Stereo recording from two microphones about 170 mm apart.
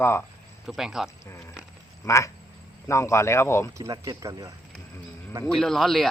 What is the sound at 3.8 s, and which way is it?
Speech, 20° right (ahead or behind).